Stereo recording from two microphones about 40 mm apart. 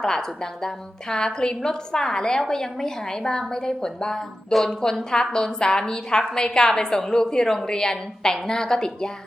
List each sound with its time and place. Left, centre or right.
0.0 s a woman's voice: centre